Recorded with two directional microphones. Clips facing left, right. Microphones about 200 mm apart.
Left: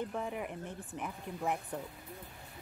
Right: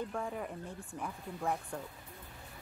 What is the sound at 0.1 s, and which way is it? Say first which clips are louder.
Speech: left 1 dB; 15° left (ahead or behind).